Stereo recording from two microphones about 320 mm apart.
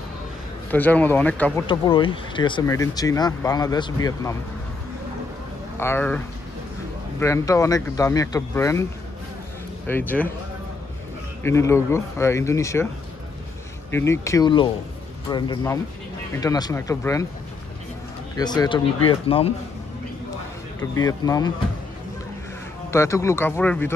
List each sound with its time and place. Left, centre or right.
0.7 s speech: centre
1.7 s speech: centre
5.8 s speech: centre
9.8 s speech: centre
11.4 s speech: centre
13.8 s speech: centre
18.3 s speech: centre
20.9 s speech: centre
22.8 s speech: centre